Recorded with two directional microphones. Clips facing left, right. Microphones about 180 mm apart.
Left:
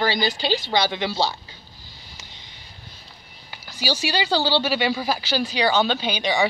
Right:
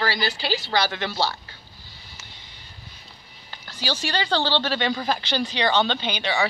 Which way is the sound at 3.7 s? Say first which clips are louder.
Left 3 dB; 10° left (ahead or behind).